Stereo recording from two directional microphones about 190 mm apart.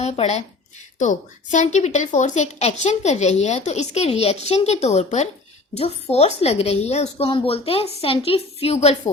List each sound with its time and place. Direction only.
0.0 s speech: 35° left (ahead or behind)